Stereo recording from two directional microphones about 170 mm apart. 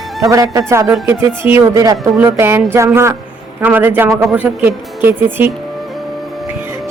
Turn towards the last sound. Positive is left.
turn(degrees=-10)  # may be behind; listen again after turning